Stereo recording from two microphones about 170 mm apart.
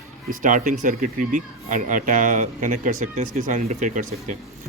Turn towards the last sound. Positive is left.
turn(degrees=-50)  # may be behind; listen again after turning